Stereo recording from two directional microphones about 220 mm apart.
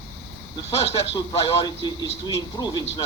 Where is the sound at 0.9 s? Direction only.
20° left (ahead or behind).